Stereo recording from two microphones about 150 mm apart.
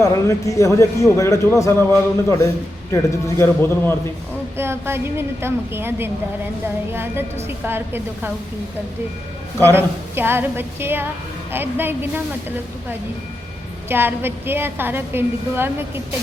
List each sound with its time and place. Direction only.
0.0 s a man's voice: 20° left (ahead or behind)
4.5 s a woman's voice: 15° right (ahead or behind)
9.7 s a woman's voice: 15° right (ahead or behind)